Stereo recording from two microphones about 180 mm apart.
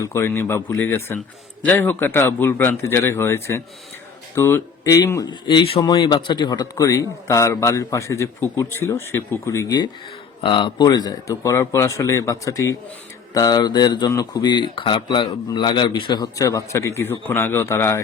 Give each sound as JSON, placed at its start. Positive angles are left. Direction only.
{"t": 0.0, "sound": "a man's voice", "side_deg": 15}